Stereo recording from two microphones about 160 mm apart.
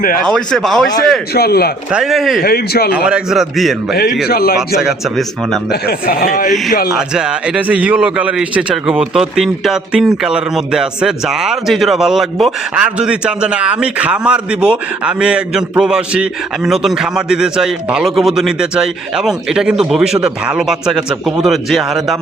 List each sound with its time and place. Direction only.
0.3 s a man's voice: centre (ahead or behind)
1.3 s a man's voice: 75° left (ahead or behind)
1.9 s a man's voice: 5° right (ahead or behind)
2.4 s a man's voice: 75° left (ahead or behind)
3.1 s a man's voice: centre (ahead or behind)
4.3 s a man's voice: 75° left (ahead or behind)
4.8 s a man's voice: centre (ahead or behind)
5.9 s a man's voice: 65° left (ahead or behind)
7.1 s a man's voice: 5° right (ahead or behind)